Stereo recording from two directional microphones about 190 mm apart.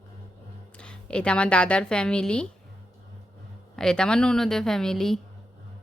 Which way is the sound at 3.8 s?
5° left (ahead or behind).